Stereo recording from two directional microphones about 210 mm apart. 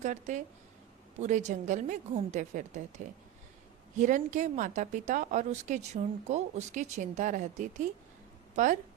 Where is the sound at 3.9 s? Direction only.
35° right (ahead or behind).